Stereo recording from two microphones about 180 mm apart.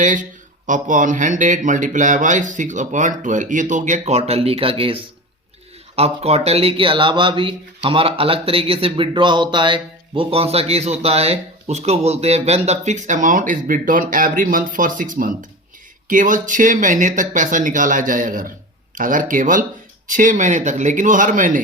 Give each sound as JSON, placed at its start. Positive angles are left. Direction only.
{"t": 0.0, "sound": "speech", "side_deg": -45}